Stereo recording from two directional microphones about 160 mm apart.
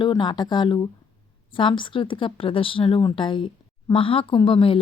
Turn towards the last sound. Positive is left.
turn(degrees=35)  # may be behind; listen again after turning